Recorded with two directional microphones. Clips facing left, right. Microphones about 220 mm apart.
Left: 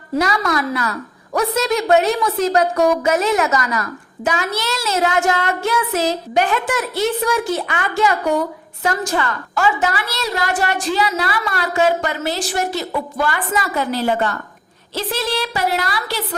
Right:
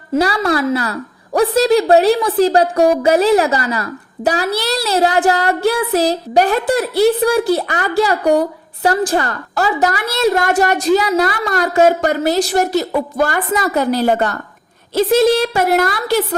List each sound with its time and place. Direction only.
0.2 s a woman's voice: 30° right (ahead or behind); by 16.2 s 50° right (ahead or behind)